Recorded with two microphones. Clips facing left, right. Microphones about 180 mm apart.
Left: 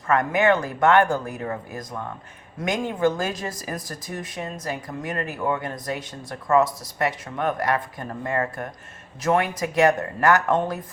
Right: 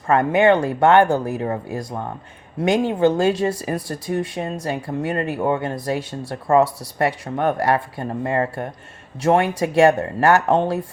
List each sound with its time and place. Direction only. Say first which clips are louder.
0.1 s speech: right 5 dB; 30° right (ahead or behind)